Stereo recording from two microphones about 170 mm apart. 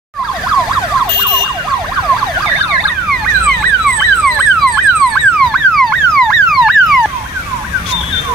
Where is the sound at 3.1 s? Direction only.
Centre (ahead or behind).